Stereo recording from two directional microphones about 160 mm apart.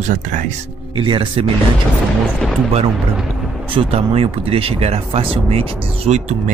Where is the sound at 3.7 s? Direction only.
35° right (ahead or behind).